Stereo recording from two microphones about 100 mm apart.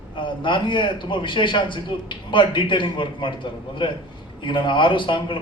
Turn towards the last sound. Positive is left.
turn(degrees=55)  # may be behind; listen again after turning